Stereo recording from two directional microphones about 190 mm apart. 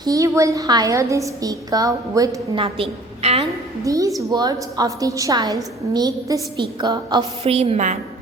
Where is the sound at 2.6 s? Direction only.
30° right (ahead or behind).